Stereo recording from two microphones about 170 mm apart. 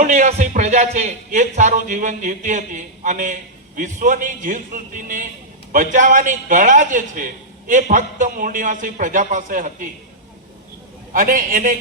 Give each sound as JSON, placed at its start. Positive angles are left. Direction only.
{"t": 0.0, "sound": "a man's voice", "side_deg": -45}
{"t": 11.1, "sound": "a man's voice", "side_deg": -55}